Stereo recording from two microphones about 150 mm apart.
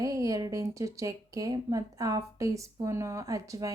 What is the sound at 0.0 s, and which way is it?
Speech, 25° right (ahead or behind).